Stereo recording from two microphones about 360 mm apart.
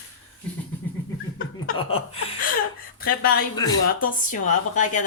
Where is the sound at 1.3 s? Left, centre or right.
Left.